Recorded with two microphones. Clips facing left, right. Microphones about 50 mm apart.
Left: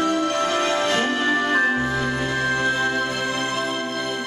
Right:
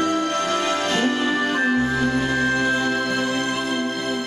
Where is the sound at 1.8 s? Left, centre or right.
Centre.